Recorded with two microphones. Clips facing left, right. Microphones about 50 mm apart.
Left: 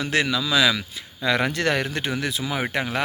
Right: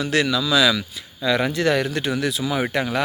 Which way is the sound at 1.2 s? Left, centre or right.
Left.